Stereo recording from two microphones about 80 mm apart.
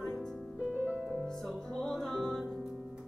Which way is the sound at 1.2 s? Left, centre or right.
Centre.